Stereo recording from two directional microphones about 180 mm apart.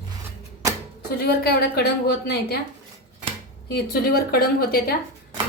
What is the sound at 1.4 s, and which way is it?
Speech, 60° left (ahead or behind).